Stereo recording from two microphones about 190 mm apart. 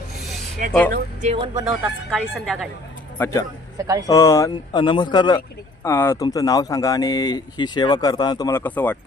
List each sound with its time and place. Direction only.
0.6 s speech: 45° right (ahead or behind)
2.0 s speech: centre (ahead or behind)
3.2 s a man's voice: 15° left (ahead or behind)
3.8 s speech: 20° right (ahead or behind)
4.0 s speech: 15° left (ahead or behind)